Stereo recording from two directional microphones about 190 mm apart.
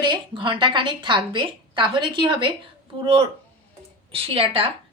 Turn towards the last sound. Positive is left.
turn(degrees=-30)  # may be behind; listen again after turning